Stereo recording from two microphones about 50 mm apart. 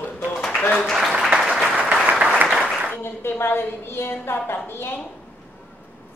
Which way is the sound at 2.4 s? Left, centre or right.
Centre.